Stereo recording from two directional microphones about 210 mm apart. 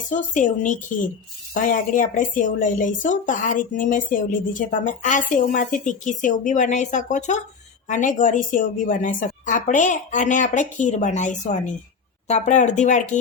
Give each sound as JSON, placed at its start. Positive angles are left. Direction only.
{"t": 0.1, "sound": "a woman's voice", "side_deg": 35}